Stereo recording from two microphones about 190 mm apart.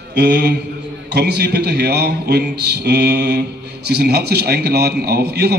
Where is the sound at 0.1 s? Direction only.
60° right (ahead or behind).